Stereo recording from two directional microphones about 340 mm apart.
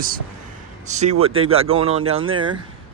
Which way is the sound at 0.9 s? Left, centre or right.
Centre.